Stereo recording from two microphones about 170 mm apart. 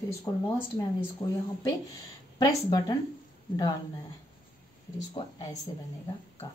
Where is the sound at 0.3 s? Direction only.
20° left (ahead or behind).